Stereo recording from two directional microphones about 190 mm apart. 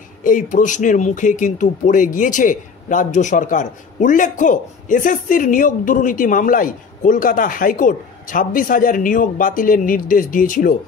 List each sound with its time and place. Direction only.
0.2 s speech: 45° left (ahead or behind)